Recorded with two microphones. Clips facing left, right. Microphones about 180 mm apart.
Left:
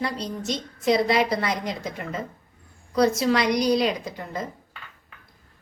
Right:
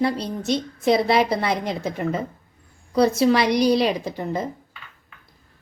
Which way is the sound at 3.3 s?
30° right (ahead or behind).